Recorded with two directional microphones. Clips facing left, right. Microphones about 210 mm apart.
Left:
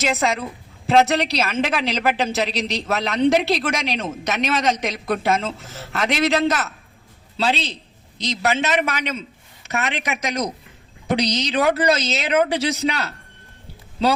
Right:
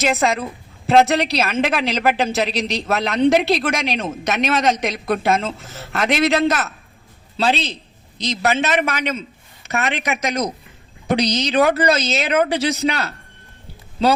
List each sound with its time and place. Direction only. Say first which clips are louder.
0.0 s a woman's voice: right 3 dB; 55° right (ahead or behind)